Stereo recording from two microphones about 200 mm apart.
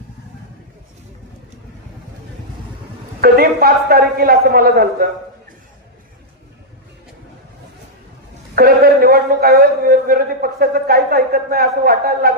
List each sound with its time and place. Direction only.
3.2 s a man's voice: 50° right (ahead or behind)
8.5 s a man's voice: 50° right (ahead or behind)